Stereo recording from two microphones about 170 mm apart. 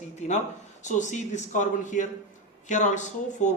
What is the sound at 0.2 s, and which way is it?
A man's voice, 40° left (ahead or behind).